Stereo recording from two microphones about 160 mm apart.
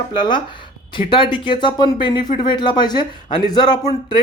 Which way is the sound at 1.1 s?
30° left (ahead or behind).